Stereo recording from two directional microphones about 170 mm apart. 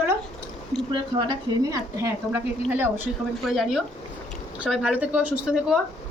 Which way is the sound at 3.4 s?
Centre (ahead or behind).